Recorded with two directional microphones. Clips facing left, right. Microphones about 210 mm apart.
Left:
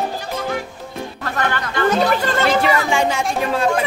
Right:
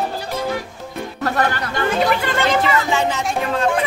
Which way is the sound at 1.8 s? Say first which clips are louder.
Left 2 dB; 40° left (ahead or behind).